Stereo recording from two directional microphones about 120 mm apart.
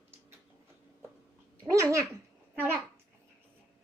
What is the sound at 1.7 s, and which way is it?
Babbling, 25° right (ahead or behind).